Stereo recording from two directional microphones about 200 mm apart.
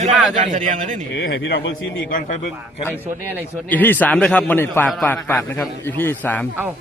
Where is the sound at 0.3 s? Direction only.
40° right (ahead or behind).